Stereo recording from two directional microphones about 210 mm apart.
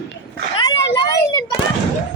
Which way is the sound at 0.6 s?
20° left (ahead or behind).